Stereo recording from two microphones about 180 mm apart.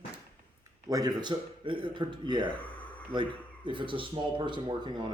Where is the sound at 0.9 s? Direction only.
20° right (ahead or behind).